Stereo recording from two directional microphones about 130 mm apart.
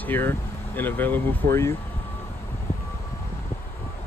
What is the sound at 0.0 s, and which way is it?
Speech, 15° left (ahead or behind).